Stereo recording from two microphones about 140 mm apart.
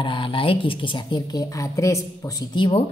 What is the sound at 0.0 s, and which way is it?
A woman's voice, 35° left (ahead or behind).